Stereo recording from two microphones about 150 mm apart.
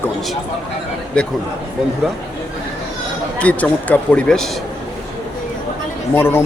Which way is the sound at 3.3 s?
10° left (ahead or behind).